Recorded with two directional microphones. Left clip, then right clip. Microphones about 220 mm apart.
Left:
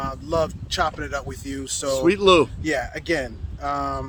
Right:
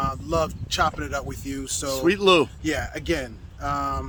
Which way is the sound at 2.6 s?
10° left (ahead or behind).